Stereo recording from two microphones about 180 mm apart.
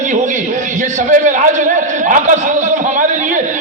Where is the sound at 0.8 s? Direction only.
45° right (ahead or behind).